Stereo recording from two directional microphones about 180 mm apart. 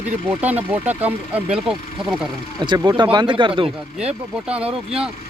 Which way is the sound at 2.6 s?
25° right (ahead or behind).